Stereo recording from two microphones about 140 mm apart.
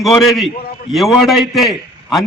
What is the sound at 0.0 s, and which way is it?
A man's voice, centre (ahead or behind).